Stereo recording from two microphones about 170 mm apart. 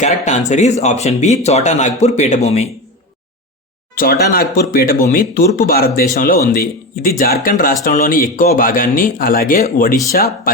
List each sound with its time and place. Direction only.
0.0 s speech: 45° left (ahead or behind)
3.9 s speech: 60° left (ahead or behind)